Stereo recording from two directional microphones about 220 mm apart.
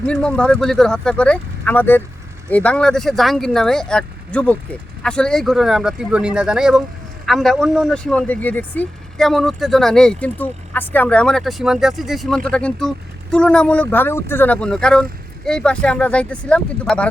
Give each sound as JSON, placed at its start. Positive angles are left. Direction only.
{"t": 0.0, "sound": "speech", "side_deg": 5}